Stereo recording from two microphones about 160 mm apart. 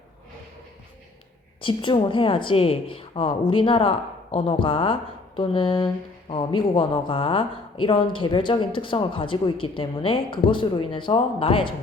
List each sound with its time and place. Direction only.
1.6 s speech: 30° left (ahead or behind)